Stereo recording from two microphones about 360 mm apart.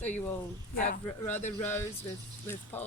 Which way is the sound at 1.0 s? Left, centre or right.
Centre.